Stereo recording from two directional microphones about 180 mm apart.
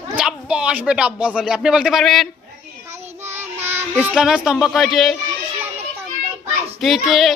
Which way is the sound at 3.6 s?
10° right (ahead or behind).